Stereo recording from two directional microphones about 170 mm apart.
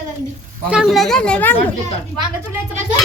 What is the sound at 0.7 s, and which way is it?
Speech, centre (ahead or behind).